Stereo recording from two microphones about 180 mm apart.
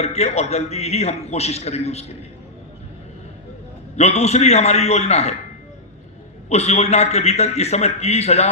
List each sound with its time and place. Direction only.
0.0 s a man's voice: 35° left (ahead or behind)
3.9 s a man's voice: 35° left (ahead or behind)
6.5 s a man's voice: 35° left (ahead or behind)